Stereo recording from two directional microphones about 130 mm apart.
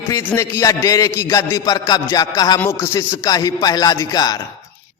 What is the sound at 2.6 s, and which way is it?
A man's voice, 20° left (ahead or behind).